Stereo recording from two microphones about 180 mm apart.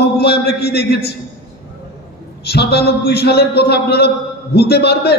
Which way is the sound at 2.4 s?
65° left (ahead or behind).